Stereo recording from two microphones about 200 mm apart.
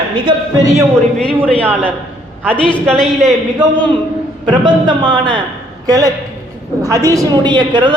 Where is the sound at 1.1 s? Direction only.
5° left (ahead or behind).